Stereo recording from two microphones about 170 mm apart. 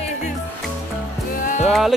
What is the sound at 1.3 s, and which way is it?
Music, 50° left (ahead or behind).